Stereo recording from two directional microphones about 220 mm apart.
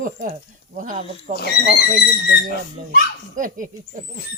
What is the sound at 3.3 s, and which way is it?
Speech, 35° right (ahead or behind).